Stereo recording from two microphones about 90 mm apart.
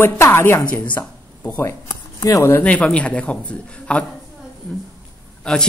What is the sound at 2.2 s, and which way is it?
Speech, 30° left (ahead or behind).